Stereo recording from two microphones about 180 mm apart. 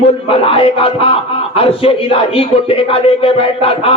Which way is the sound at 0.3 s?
30° left (ahead or behind).